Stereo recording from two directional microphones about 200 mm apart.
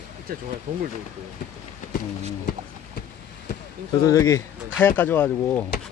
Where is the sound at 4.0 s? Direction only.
15° left (ahead or behind).